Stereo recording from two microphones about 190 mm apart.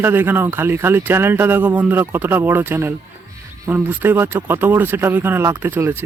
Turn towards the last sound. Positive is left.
turn(degrees=-10)  # may be behind; listen again after turning